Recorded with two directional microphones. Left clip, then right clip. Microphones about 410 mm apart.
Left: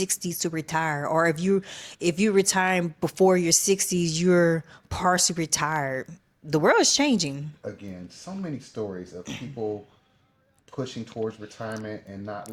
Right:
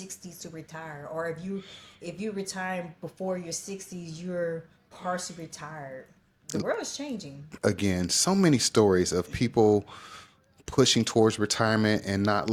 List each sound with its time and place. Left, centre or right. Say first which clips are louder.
0.0 s speech: left 15 dB; left
7.6 s speech: right 16 dB; right
10.7 s speech: right 11 dB; right